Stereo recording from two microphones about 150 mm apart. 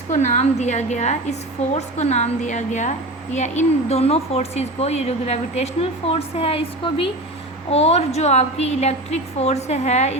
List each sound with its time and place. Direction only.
0.1 s speech: 50° left (ahead or behind)